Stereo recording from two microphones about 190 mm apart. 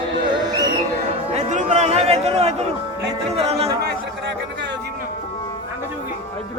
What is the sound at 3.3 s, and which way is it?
Music, 30° right (ahead or behind).